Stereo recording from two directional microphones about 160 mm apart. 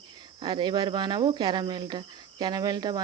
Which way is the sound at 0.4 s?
30° right (ahead or behind).